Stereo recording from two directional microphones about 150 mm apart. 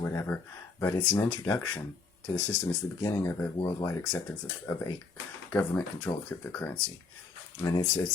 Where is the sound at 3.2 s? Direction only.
15° left (ahead or behind).